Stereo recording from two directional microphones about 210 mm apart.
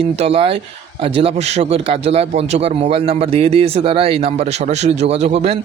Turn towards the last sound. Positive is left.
turn(degrees=-30)  # may be behind; listen again after turning